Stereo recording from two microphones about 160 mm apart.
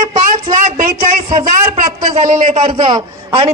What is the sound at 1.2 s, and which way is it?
Speech, 35° right (ahead or behind).